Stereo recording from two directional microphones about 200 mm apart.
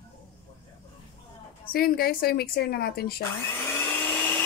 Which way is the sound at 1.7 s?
50° left (ahead or behind).